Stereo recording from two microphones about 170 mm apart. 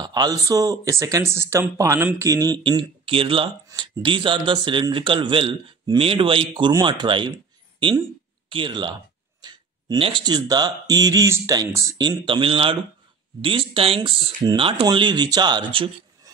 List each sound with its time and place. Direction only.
0.0 s a man's voice: 25° right (ahead or behind)
8.5 s a man's voice: 30° right (ahead or behind)